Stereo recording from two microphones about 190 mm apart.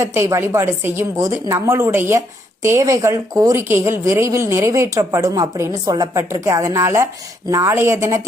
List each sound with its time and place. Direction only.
0.0 s a woman's voice: 15° right (ahead or behind)